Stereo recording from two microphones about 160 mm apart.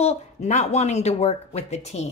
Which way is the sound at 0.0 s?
45° left (ahead or behind).